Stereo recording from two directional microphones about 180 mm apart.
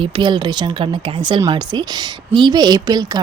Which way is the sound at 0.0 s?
25° right (ahead or behind).